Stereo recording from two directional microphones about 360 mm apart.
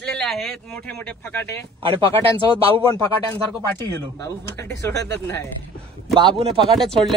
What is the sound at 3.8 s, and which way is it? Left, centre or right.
Speech, centre.